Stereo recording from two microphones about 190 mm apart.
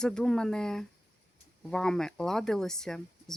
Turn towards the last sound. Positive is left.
turn(degrees=5)  # may be behind; listen again after turning